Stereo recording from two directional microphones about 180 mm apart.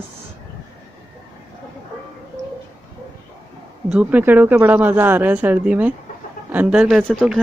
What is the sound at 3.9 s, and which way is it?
Speech, 10° right (ahead or behind).